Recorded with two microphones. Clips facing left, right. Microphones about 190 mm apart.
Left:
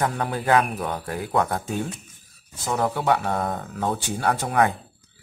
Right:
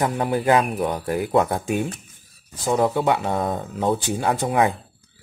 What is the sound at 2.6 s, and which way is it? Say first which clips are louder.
Speech: right 4 dB; 20° right (ahead or behind).